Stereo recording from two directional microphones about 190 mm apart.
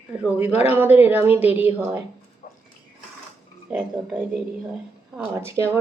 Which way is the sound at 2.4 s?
40° left (ahead or behind).